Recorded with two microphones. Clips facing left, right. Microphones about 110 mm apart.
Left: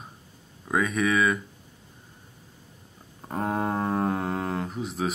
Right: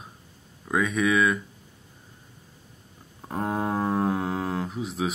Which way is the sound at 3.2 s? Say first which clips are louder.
Even; centre (ahead or behind).